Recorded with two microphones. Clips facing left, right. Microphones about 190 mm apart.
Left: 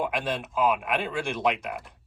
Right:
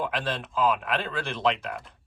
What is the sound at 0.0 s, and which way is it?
Speech, 10° left (ahead or behind).